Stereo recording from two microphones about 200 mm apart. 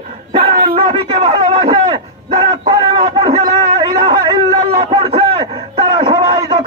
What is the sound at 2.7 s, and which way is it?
Speech, 25° right (ahead or behind).